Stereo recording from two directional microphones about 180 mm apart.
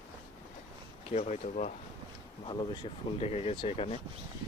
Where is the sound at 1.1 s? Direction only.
40° left (ahead or behind).